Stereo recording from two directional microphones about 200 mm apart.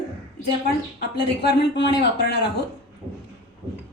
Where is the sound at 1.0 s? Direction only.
55° left (ahead or behind).